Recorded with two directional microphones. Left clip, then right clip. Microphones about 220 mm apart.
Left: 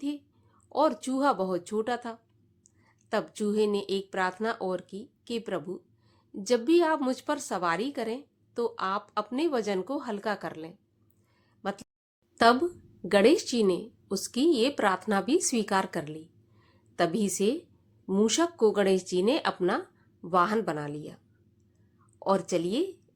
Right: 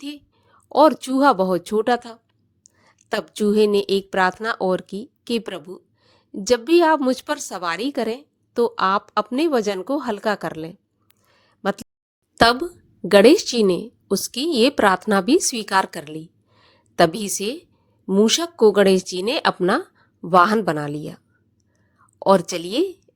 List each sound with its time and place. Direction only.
0.0 s a woman's voice: 40° right (ahead or behind)
11.3 s a sound: 35° right (ahead or behind)
12.3 s a woman's voice: 40° right (ahead or behind)
22.2 s a woman's voice: 40° right (ahead or behind)